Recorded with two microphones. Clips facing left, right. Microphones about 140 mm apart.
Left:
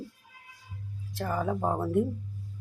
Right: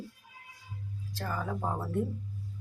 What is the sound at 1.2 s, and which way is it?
Speech, 25° left (ahead or behind).